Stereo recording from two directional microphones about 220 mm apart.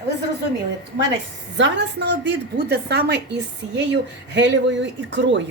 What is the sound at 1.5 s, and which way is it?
A woman's voice, 55° right (ahead or behind).